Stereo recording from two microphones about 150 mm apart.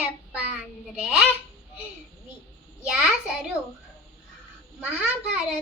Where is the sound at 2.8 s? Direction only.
5° right (ahead or behind).